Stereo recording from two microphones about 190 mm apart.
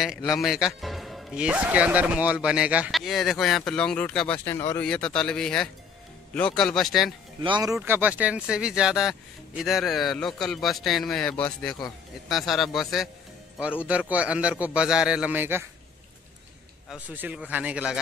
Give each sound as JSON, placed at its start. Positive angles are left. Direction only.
{"t": 0.0, "sound": "a man's voice", "side_deg": 0}
{"t": 7.4, "sound": "a man's voice", "side_deg": -20}
{"t": 16.9, "sound": "a man's voice", "side_deg": -10}